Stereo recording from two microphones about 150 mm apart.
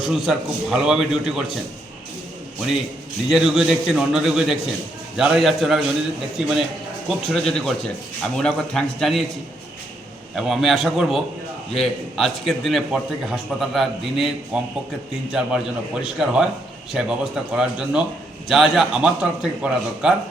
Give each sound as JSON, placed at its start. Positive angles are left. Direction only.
{"t": 0.0, "sound": "a man's voice", "side_deg": -5}
{"t": 3.2, "sound": "a man's voice", "side_deg": 0}
{"t": 10.3, "sound": "a man's voice", "side_deg": 0}